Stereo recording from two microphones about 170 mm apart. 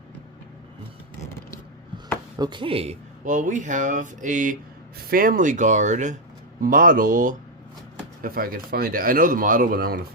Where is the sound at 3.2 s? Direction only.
50° right (ahead or behind).